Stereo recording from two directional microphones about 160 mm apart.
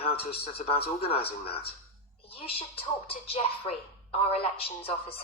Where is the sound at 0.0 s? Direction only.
35° left (ahead or behind).